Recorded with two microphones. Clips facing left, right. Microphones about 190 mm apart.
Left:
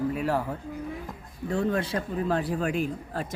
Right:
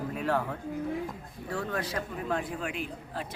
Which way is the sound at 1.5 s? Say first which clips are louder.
Left 6 dB; 25° left (ahead or behind).